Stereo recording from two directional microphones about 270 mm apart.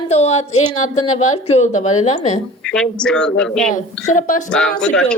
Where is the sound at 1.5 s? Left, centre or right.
Left.